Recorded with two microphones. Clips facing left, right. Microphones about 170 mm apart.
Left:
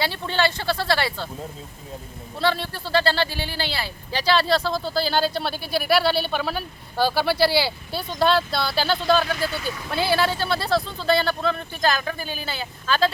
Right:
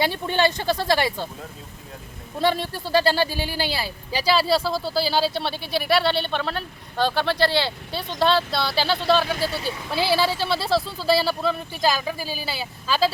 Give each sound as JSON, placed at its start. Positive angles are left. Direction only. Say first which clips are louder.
{"t": 0.0, "sound": "speech", "louder": "right 2 dB", "side_deg": -15}
{"t": 2.4, "sound": "speech", "louder": "right 1 dB", "side_deg": -15}
{"t": 9.5, "sound": "speech", "louder": "right 1 dB", "side_deg": -30}
{"t": 9.9, "sound": "speech", "louder": "even", "side_deg": 0}